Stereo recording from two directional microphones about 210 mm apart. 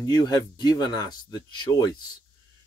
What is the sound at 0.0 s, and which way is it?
Speech, 20° left (ahead or behind).